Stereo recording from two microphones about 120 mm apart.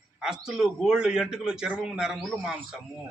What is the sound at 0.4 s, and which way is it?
A man's voice, 5° right (ahead or behind).